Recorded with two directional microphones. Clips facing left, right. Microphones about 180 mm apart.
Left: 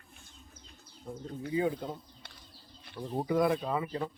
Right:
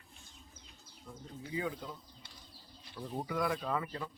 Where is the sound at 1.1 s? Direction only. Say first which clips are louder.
Left 8 dB; 30° left (ahead or behind).